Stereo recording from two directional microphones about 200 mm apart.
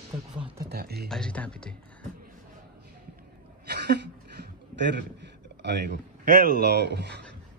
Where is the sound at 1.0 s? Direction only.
5° left (ahead or behind).